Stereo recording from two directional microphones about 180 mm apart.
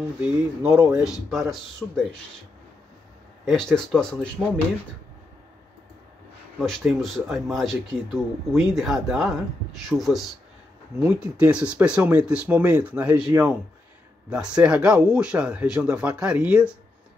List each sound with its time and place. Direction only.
0.2 s speech: 5° right (ahead or behind)
3.7 s speech: 5° left (ahead or behind)
6.6 s speech: centre (ahead or behind)